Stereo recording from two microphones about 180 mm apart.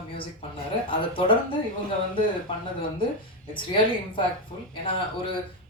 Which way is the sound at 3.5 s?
30° left (ahead or behind).